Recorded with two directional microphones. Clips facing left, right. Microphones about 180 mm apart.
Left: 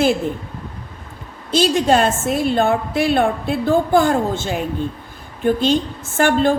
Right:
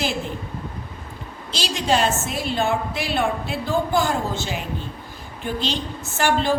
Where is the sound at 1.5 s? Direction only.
50° left (ahead or behind).